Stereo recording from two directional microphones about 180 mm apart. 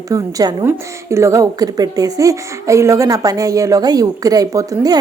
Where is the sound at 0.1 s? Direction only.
20° right (ahead or behind).